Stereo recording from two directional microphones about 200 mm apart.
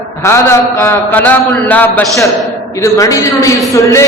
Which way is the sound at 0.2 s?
15° left (ahead or behind).